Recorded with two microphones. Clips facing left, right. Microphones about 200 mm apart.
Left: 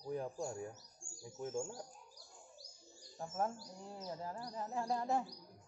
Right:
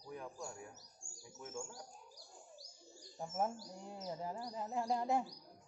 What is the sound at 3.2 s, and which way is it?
Speech, 15° right (ahead or behind).